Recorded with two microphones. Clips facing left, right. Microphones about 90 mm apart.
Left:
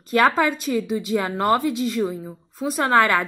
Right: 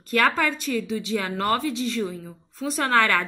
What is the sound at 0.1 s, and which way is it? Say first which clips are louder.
Speech: left 4 dB; 20° left (ahead or behind).